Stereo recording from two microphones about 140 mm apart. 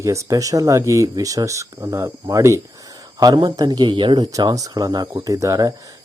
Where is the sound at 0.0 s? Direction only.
20° right (ahead or behind).